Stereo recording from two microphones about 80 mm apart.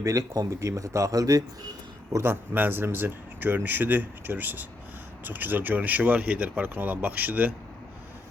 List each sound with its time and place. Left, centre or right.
0.0 s a man's voice: right
2.1 s speech: right